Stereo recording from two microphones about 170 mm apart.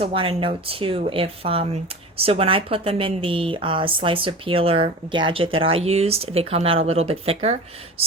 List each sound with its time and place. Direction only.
0.0 s speech: 35° right (ahead or behind)